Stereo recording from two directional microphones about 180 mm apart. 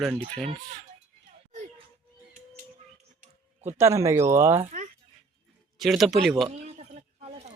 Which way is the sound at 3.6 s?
15° right (ahead or behind).